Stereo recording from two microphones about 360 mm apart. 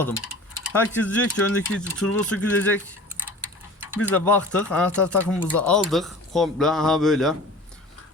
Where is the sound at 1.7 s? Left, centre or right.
Left.